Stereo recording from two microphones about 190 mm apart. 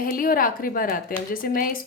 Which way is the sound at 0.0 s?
45° left (ahead or behind).